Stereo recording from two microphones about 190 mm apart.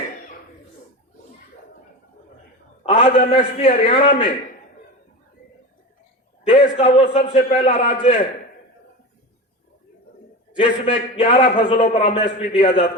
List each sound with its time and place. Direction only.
2.8 s a man's voice: 30° left (ahead or behind)
6.4 s a man's voice: 30° left (ahead or behind)
7.9 s a man's voice: 45° left (ahead or behind)
10.6 s a man's voice: 30° left (ahead or behind)